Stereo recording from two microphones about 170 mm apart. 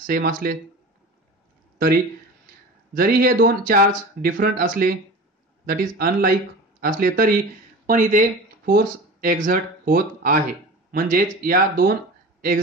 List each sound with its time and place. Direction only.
0.0 s speech: 55° right (ahead or behind)
2.9 s speech: 60° right (ahead or behind)